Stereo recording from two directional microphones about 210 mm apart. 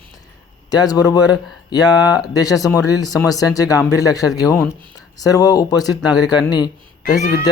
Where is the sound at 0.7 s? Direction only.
20° left (ahead or behind).